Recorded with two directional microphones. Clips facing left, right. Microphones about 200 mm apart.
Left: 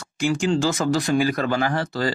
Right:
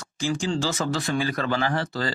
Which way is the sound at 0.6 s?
45° left (ahead or behind).